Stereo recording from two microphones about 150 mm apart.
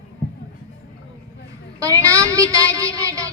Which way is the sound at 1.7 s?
20° right (ahead or behind).